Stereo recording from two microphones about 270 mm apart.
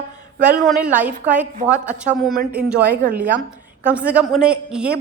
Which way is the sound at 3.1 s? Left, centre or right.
Centre.